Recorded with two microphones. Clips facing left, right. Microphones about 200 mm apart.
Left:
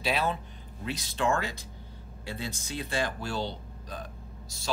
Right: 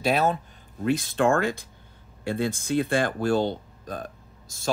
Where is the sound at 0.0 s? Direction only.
45° right (ahead or behind).